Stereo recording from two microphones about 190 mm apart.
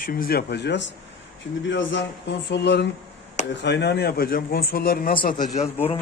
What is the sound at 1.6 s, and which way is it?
A man's voice, 75° left (ahead or behind).